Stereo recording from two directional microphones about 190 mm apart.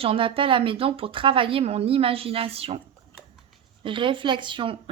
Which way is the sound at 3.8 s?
25° right (ahead or behind).